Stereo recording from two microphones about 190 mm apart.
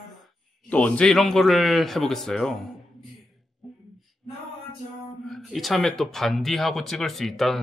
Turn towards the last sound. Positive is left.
turn(degrees=0)  # may be behind; listen again after turning